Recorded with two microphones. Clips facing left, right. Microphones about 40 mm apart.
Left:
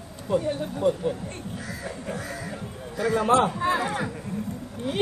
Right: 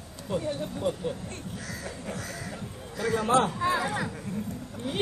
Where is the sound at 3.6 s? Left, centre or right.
Left.